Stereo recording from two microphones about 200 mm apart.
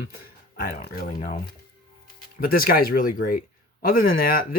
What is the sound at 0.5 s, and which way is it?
Speech, 45° left (ahead or behind).